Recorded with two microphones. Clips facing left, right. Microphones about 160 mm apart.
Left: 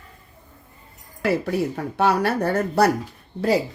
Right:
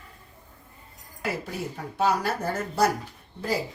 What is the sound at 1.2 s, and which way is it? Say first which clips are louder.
Speech: left 9 dB; 65° left (ahead or behind).